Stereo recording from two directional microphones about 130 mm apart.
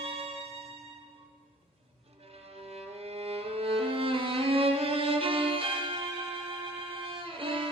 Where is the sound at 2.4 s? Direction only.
50° right (ahead or behind).